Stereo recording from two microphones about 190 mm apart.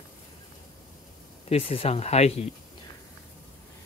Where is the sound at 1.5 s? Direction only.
30° left (ahead or behind).